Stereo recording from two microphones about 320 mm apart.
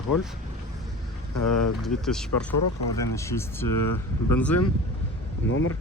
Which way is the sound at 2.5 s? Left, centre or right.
Left.